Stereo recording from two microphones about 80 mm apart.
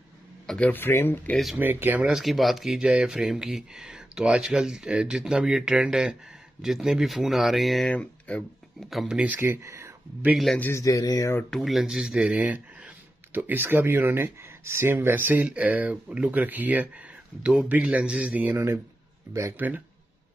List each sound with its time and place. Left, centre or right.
0.6 s speech: left
1.3 s speech: centre
1.6 s speech: right
2.1 s speech: centre
7.9 s a sound: centre
8.9 s speech: centre
9.4 s speech: right
10.3 s speech: centre
10.7 s speech: left
11.5 s speech: centre
11.9 s speech: centre
19.5 s speech: right